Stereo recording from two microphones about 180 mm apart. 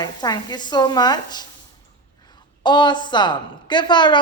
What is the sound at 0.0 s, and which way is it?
A woman's voice, 20° left (ahead or behind).